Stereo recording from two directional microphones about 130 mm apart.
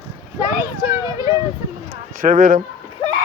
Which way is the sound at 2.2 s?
75° right (ahead or behind).